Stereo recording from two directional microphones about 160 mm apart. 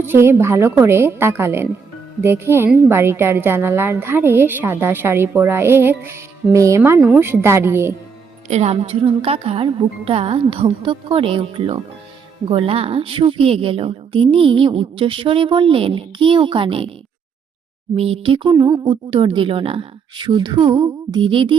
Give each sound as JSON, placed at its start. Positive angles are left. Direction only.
{"t": 0.0, "sound": "a woman's voice", "side_deg": -15}
{"t": 8.4, "sound": "a woman's voice", "side_deg": -45}
{"t": 17.9, "sound": "a woman's voice", "side_deg": -40}
{"t": 18.6, "sound": "speech", "side_deg": -25}
{"t": 19.1, "sound": "a woman's voice", "side_deg": -35}